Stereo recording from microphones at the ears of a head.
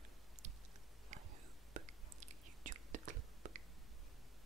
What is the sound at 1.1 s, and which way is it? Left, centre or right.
Whispering, right.